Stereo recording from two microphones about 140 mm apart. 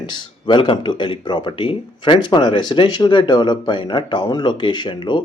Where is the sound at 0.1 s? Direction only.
35° left (ahead or behind).